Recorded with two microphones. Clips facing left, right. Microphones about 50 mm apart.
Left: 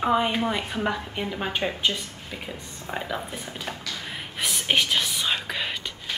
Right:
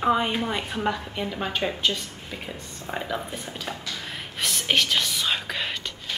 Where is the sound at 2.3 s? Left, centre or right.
Centre.